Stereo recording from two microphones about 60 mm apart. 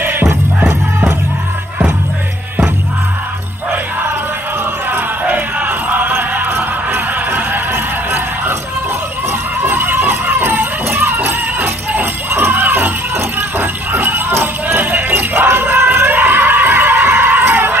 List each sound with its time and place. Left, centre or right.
0.0 s music: right
4.9 s music: right
9.6 s music: right
13.6 s jingle bell: right